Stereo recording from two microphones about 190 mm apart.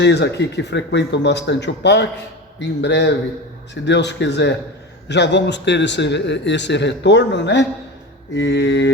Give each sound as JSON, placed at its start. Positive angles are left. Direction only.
{"t": 0.0, "sound": "a man's voice", "side_deg": 65}